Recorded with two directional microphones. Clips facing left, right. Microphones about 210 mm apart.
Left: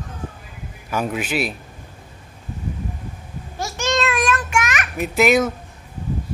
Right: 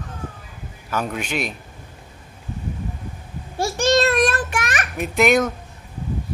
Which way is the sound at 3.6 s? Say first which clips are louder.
Right 5 dB; 35° right (ahead or behind).